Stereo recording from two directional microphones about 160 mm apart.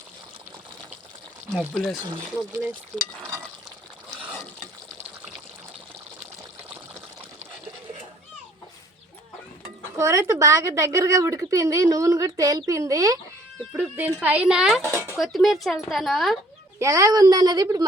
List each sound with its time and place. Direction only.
1.7 s speech: 5° left (ahead or behind)
2.3 s speech: 10° right (ahead or behind)
9.9 s a woman's voice: 20° right (ahead or behind); by 16.4 s centre (ahead or behind)
16.8 s a woman's voice: 20° right (ahead or behind)